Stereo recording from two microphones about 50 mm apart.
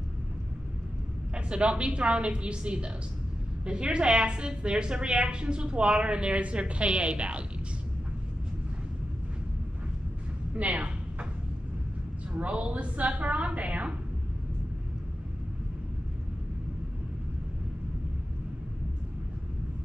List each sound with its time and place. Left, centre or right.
1.3 s a woman's voice: right
10.5 s a sound: right
12.3 s a woman's voice: right